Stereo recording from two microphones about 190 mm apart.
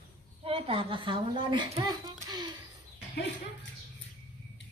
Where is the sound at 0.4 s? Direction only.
30° right (ahead or behind).